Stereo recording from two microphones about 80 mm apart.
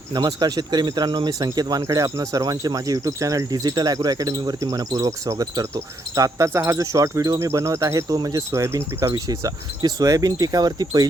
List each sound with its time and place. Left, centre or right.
0.1 s speech: right
6.9 s speech: right